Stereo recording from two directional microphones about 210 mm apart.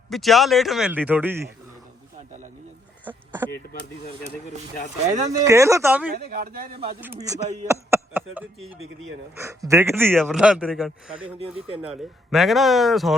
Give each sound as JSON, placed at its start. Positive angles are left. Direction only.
{"t": 0.1, "sound": "a man's voice", "side_deg": 0}
{"t": 3.1, "sound": "a sound", "side_deg": -10}
{"t": 5.0, "sound": "speech", "side_deg": -35}
{"t": 5.4, "sound": "speech", "side_deg": -15}
{"t": 6.3, "sound": "speech", "side_deg": -45}
{"t": 7.0, "sound": "a man's voice", "side_deg": -15}